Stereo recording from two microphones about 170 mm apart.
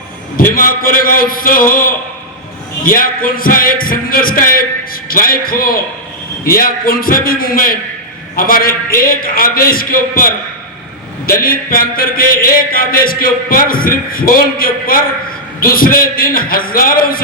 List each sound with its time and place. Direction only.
0.5 s a man's voice: 55° left (ahead or behind)